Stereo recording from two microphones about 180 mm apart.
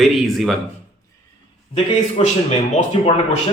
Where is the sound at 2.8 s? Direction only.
40° left (ahead or behind).